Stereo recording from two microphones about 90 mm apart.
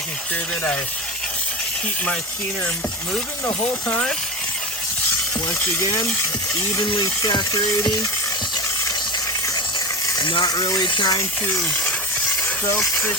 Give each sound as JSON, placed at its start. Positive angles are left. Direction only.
{"t": 3.4, "sound": "speech", "side_deg": 15}
{"t": 6.8, "sound": "speech", "side_deg": 60}
{"t": 7.2, "sound": "speech", "side_deg": 45}
{"t": 10.4, "sound": "speech", "side_deg": 40}
{"t": 10.8, "sound": "speech", "side_deg": 55}
{"t": 11.6, "sound": "a sound", "side_deg": 20}